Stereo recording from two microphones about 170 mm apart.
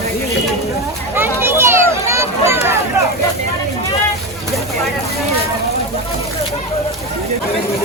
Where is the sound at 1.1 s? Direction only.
15° right (ahead or behind).